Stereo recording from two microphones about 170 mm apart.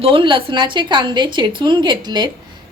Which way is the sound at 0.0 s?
30° right (ahead or behind).